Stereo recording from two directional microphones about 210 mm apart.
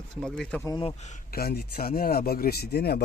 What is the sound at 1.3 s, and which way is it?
Speech, 45° left (ahead or behind).